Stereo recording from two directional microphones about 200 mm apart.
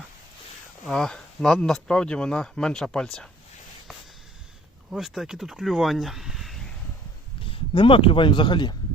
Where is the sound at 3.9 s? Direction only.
Centre (ahead or behind).